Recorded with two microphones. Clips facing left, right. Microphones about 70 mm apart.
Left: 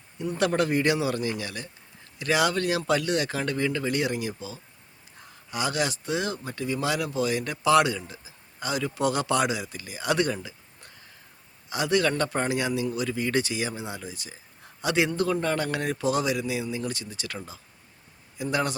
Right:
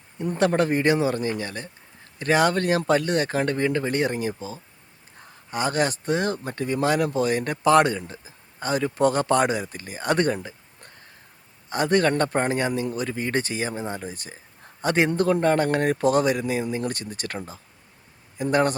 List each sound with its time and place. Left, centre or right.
0.2 s a man's voice: right